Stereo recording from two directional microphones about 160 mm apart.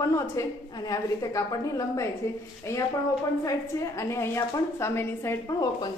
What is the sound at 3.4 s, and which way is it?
A woman's voice, 20° left (ahead or behind).